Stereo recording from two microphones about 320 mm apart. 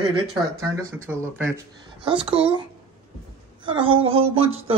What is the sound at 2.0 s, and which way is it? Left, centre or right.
Speech, centre.